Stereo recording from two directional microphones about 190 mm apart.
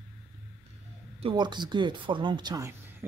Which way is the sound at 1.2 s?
25° right (ahead or behind).